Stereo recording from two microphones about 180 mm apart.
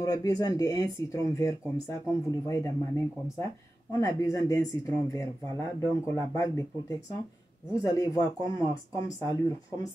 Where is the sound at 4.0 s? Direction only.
20° left (ahead or behind).